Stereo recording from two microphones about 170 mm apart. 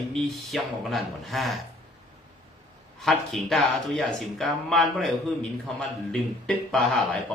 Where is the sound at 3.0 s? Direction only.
Centre (ahead or behind).